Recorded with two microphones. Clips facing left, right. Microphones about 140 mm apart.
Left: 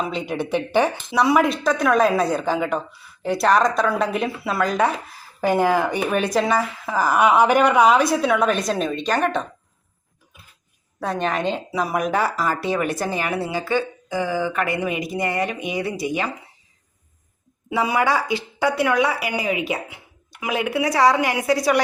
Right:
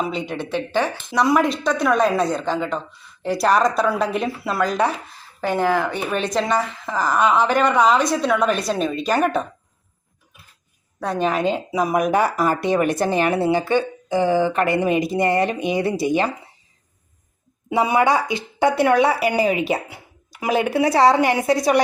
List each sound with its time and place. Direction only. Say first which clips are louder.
0.0 s speech: right 1 dB; centre (ahead or behind)
0.3 s speech: left 4 dB; 15° left (ahead or behind)
1.1 s speech: right 1 dB; 5° left (ahead or behind)
5.4 s speech: left 1 dB; 10° left (ahead or behind); by 9.5 s 10° right (ahead or behind)
11.0 s speech: right 2 dB; centre (ahead or behind); by 16.3 s 30° right (ahead or behind)
17.7 s speech: right 3 dB; 25° right (ahead or behind)